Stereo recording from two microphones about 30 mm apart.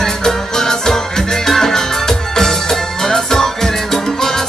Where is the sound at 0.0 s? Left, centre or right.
Centre.